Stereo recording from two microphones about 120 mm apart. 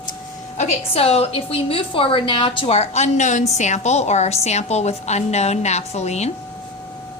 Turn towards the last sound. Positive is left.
turn(degrees=65)  # may be behind; listen again after turning